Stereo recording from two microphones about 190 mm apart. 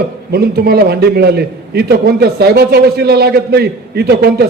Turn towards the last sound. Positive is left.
turn(degrees=-55)  # may be behind; listen again after turning